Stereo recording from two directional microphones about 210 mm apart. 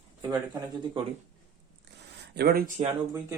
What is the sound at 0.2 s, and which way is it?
Speech, 20° right (ahead or behind).